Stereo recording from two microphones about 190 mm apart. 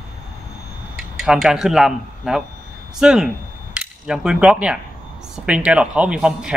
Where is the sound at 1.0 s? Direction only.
Centre (ahead or behind).